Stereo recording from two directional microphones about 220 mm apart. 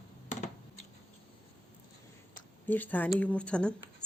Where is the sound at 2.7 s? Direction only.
10° left (ahead or behind).